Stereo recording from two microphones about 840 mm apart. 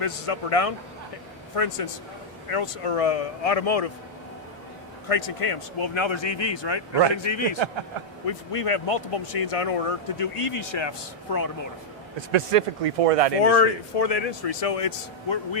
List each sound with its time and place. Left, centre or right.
0.0 s speech: left
5.0 s speech: left
12.1 s speech: right
13.4 s speech: left